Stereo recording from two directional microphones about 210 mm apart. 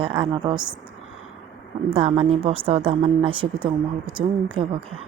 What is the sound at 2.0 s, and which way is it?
Speech, 30° right (ahead or behind).